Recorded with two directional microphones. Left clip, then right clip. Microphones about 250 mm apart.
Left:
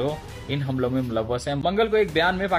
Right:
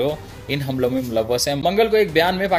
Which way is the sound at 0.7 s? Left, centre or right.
Right.